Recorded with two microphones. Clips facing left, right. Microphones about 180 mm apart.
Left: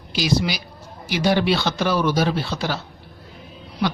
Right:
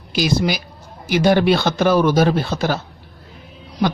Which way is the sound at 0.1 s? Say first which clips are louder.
Right 3 dB; 50° right (ahead or behind).